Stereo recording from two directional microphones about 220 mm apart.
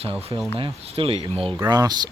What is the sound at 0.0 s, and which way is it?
Speech, 25° right (ahead or behind).